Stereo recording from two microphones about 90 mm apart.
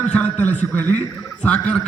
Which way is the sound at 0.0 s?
15° left (ahead or behind).